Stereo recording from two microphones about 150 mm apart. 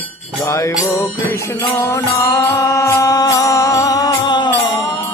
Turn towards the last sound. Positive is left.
turn(degrees=30)  # may be behind; listen again after turning